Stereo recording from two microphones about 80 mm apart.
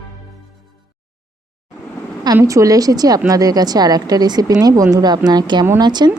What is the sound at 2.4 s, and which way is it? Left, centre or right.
Speech, right.